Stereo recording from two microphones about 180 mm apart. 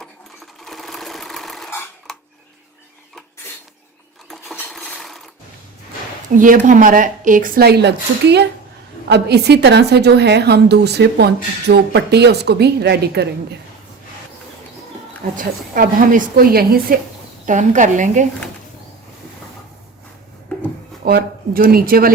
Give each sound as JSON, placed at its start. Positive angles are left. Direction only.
{"t": 0.6, "sound": "sewing machine", "side_deg": 0}
{"t": 4.7, "sound": "mechanisms", "side_deg": 0}
{"t": 6.3, "sound": "a woman's voice", "side_deg": -45}
{"t": 15.4, "sound": "a woman's voice", "side_deg": -50}
{"t": 17.4, "sound": "a woman's voice", "side_deg": -45}
{"t": 21.0, "sound": "speech", "side_deg": -55}